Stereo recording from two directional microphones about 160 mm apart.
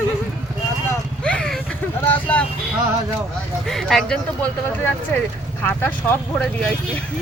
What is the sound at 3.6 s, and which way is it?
Speech, centre (ahead or behind).